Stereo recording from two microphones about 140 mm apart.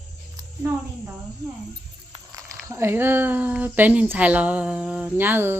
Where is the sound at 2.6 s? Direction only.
20° right (ahead or behind).